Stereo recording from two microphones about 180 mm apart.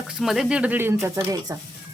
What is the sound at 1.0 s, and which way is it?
Speech, 20° right (ahead or behind).